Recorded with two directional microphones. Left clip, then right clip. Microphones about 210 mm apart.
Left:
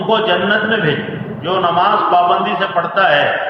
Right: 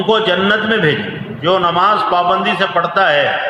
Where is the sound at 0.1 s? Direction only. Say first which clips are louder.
Even; 55° right (ahead or behind).